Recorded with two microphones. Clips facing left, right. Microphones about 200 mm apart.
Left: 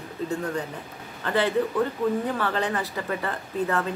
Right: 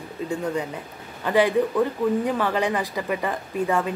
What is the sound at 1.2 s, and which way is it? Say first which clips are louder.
A man's voice: right 4 dB; 10° right (ahead or behind).